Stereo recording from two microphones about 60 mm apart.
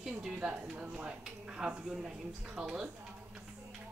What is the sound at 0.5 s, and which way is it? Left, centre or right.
Speech, right.